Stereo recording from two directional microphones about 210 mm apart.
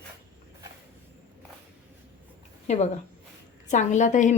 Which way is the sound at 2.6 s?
30° left (ahead or behind).